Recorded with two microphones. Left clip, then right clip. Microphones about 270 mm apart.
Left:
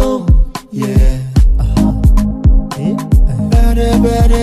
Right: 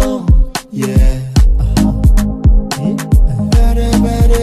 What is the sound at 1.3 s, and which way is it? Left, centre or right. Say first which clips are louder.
Music: right 1 dB; centre.